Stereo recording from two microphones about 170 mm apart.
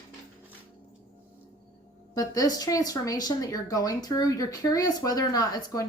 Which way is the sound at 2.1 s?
20° left (ahead or behind).